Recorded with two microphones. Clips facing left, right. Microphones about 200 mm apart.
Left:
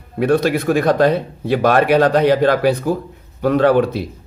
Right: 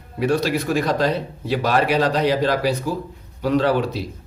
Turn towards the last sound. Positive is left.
turn(degrees=55)  # may be behind; listen again after turning